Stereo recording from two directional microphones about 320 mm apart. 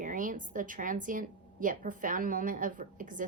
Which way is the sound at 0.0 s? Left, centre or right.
Right.